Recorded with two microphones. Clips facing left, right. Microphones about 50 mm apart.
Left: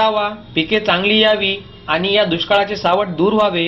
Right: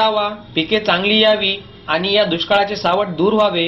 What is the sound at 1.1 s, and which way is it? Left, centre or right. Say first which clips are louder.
Speech: even; centre.